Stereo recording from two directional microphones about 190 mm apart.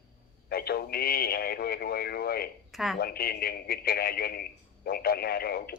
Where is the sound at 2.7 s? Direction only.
Centre (ahead or behind).